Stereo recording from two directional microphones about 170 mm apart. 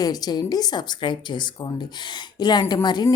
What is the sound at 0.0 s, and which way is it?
A woman's voice, 20° left (ahead or behind).